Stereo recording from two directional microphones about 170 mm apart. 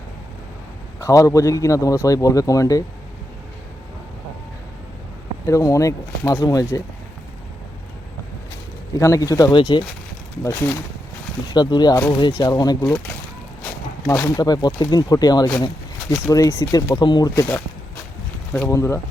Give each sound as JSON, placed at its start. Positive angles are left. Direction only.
{"t": 0.9, "sound": "speech", "side_deg": 20}
{"t": 5.5, "sound": "speech", "side_deg": 20}
{"t": 9.0, "sound": "speech", "side_deg": 20}
{"t": 10.4, "sound": "speech", "side_deg": 15}
{"t": 13.7, "sound": "walk", "side_deg": 5}
{"t": 14.3, "sound": "speech", "side_deg": 20}